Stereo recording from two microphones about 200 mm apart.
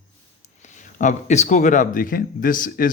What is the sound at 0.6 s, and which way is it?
Speech, 40° left (ahead or behind).